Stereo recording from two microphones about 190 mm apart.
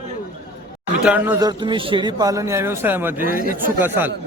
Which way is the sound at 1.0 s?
10° right (ahead or behind).